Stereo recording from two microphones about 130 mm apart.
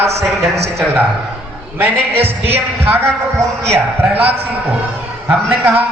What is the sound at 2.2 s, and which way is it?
Speech, 50° right (ahead or behind).